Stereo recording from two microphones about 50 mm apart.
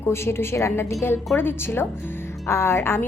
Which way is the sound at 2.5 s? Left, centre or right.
Left.